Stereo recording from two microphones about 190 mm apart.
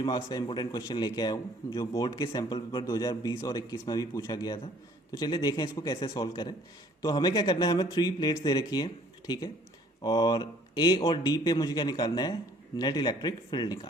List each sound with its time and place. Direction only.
0.0 s a man's voice: 20° left (ahead or behind)